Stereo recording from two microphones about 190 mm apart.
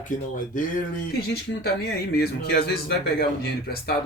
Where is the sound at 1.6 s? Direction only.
55° left (ahead or behind).